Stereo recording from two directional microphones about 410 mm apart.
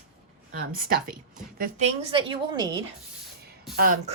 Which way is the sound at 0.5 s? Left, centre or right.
Right.